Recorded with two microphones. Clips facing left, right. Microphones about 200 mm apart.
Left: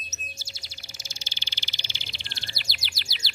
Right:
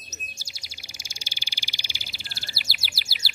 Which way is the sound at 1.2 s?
10° right (ahead or behind).